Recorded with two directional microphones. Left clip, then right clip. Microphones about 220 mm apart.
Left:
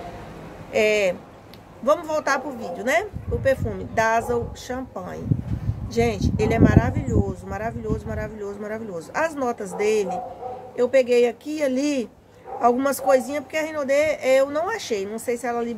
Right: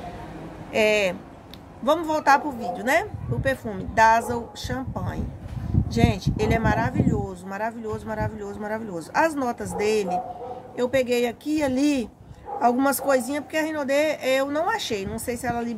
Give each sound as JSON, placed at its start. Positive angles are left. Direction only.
{"t": 0.7, "sound": "a woman's voice", "side_deg": -5}